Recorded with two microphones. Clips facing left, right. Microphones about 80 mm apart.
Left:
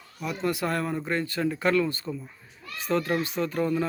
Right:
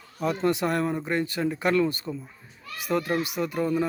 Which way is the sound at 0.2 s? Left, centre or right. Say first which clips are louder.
Right 4 dB; right.